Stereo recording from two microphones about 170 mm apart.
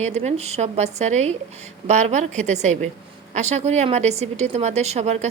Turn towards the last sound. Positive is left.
turn(degrees=-40)  # may be behind; listen again after turning